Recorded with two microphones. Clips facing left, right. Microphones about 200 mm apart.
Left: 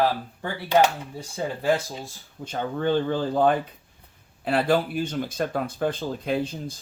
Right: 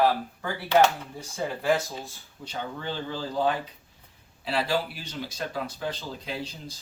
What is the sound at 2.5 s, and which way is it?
Speech, 50° left (ahead or behind).